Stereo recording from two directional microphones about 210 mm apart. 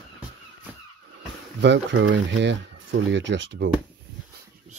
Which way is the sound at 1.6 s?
60° right (ahead or behind).